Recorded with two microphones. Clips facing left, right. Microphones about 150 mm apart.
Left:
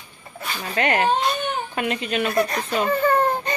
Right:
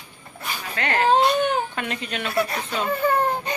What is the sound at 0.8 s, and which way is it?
Speech, 20° left (ahead or behind).